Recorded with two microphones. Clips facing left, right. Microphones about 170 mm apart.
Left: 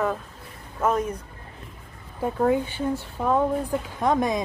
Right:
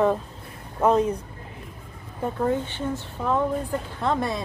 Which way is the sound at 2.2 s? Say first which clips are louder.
Left 2 dB; 10° left (ahead or behind).